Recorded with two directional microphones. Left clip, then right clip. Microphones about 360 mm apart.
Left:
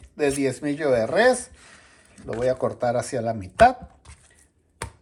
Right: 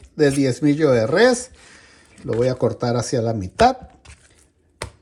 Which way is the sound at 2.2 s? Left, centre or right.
Centre.